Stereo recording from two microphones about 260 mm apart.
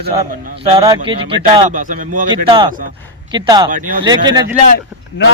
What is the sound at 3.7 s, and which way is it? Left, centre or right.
Speech, right.